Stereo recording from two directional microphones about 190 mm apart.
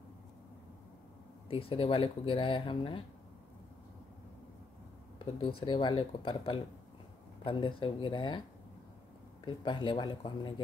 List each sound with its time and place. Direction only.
1.5 s speech: 30° left (ahead or behind)
5.2 s speech: 25° left (ahead or behind)
9.4 s speech: 25° left (ahead or behind)